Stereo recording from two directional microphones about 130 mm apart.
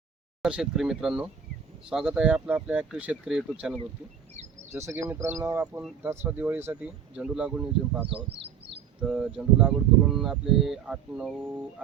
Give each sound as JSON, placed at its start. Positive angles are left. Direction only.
{"t": 0.4, "sound": "speech", "side_deg": -5}
{"t": 4.7, "sound": "speech", "side_deg": -20}